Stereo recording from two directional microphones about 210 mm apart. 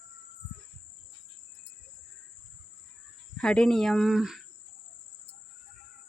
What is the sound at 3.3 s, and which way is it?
Speech, 5° left (ahead or behind).